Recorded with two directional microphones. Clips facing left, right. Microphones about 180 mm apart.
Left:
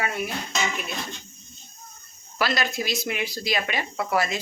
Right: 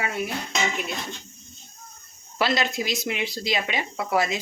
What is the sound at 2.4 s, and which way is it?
Speech, 20° right (ahead or behind).